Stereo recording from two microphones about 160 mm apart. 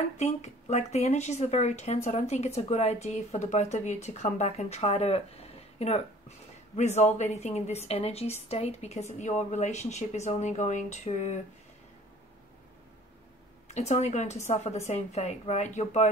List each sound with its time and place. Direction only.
0.2 s speech: 45° left (ahead or behind)
13.7 s speech: 45° left (ahead or behind)